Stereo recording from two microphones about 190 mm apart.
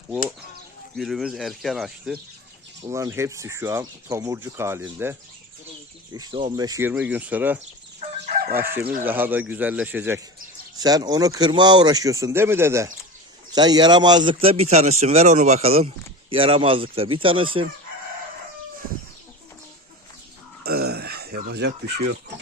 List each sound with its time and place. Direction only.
0.9 s speech: centre (ahead or behind)
2.8 s speech: 15° right (ahead or behind)
6.6 s speech: 15° right (ahead or behind)
8.8 s speech: 50° right (ahead or behind)
9.0 s speech: 10° right (ahead or behind)
10.8 s speech: 20° right (ahead or behind)
20.7 s a sound: 55° right (ahead or behind)